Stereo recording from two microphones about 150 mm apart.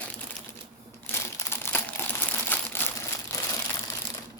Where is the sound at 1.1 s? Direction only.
15° left (ahead or behind).